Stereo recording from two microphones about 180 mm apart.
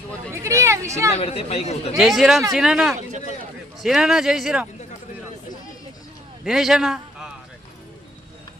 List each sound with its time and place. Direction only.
0.3 s a sound: 15° right (ahead or behind)
1.1 s speech: 35° left (ahead or behind)
2.0 s speech: centre (ahead or behind)
6.4 s a man's voice: centre (ahead or behind)